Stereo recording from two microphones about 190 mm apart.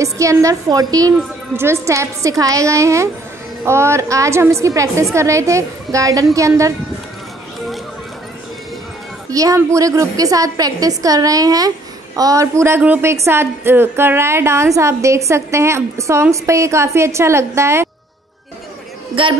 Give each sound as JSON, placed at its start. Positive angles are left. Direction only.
{"t": 0.0, "sound": "a woman's voice", "side_deg": -15}
{"t": 9.3, "sound": "a woman's voice", "side_deg": -15}
{"t": 19.2, "sound": "a man's voice", "side_deg": -30}